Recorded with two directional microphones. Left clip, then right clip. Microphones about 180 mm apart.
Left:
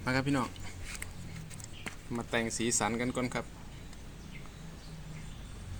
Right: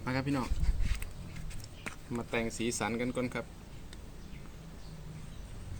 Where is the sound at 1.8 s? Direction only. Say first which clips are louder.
Even; 15° left (ahead or behind).